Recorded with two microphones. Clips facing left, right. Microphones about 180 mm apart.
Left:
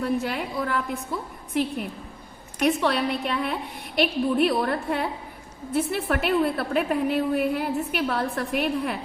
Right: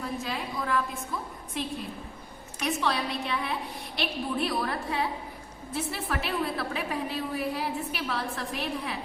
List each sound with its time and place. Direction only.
0.0 s a woman's voice: 65° left (ahead or behind)
2.6 s a woman's voice: 60° left (ahead or behind)